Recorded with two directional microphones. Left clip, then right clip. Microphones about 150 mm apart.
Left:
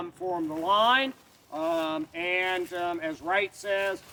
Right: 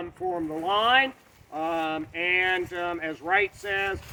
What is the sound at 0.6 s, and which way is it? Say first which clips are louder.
Speech: right 1 dB; 35° left (ahead or behind).